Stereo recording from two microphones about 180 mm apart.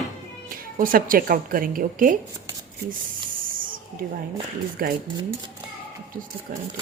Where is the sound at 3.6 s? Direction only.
50° right (ahead or behind).